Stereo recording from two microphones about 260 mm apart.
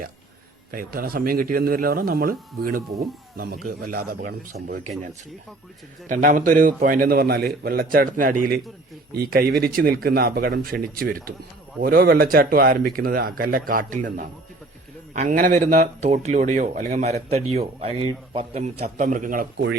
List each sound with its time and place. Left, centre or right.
0.7 s a man's voice: right
6.1 s a man's voice: right